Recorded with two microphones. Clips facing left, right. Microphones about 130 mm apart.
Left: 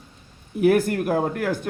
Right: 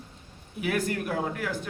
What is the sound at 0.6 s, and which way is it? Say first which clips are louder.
Speech: left 10 dB; 50° left (ahead or behind).